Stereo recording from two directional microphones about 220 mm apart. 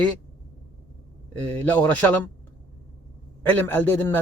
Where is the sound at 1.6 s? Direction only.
5° left (ahead or behind).